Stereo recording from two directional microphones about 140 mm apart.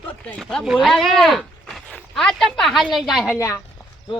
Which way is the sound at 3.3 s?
25° left (ahead or behind).